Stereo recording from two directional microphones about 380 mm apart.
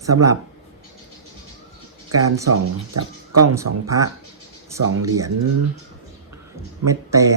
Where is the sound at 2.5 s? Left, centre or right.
Right.